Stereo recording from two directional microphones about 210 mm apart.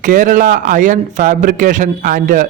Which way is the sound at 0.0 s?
40° right (ahead or behind).